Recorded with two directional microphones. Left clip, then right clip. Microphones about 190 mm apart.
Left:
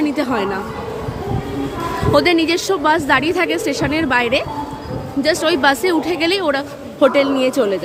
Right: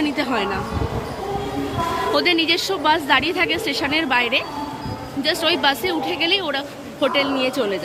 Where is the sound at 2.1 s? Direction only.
25° left (ahead or behind).